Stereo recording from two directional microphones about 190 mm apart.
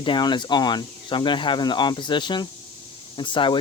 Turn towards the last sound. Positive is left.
turn(degrees=25)  # may be behind; listen again after turning